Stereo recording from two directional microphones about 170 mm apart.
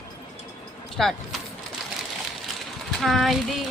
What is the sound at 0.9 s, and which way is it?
Speech, centre (ahead or behind).